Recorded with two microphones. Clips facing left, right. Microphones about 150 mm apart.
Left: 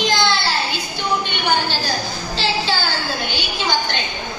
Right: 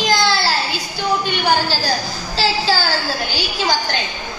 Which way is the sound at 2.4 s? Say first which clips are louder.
Right 4 dB; 40° right (ahead or behind).